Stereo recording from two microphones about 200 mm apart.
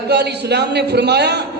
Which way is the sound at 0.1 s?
55° right (ahead or behind).